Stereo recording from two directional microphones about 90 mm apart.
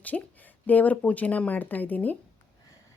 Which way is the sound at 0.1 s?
5° left (ahead or behind).